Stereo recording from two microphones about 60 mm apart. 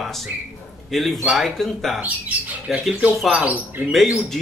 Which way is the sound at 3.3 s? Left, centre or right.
Right.